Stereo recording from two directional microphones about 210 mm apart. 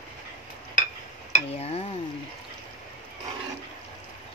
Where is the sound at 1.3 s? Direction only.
30° left (ahead or behind).